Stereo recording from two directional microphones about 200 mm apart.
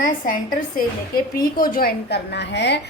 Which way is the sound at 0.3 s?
45° left (ahead or behind).